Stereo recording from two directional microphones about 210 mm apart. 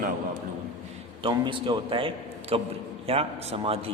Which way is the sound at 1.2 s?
25° right (ahead or behind).